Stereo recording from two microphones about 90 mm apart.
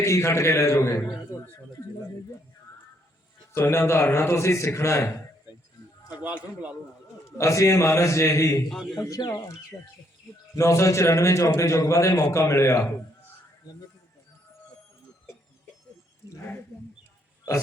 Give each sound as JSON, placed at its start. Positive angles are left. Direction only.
{"t": 0.0, "sound": "a man's voice", "side_deg": 35}
{"t": 3.5, "sound": "a man's voice", "side_deg": 30}
{"t": 6.1, "sound": "a man's voice", "side_deg": -15}
{"t": 7.3, "sound": "a man's voice", "side_deg": 35}